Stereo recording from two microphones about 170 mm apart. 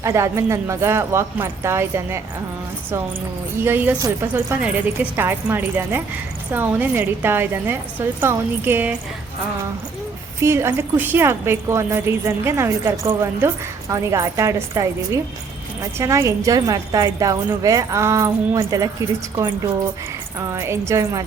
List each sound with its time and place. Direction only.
0.0 s a woman's voice: 15° right (ahead or behind)
3.6 s a woman's voice: 10° right (ahead or behind)
10.4 s a woman's voice: 15° right (ahead or behind)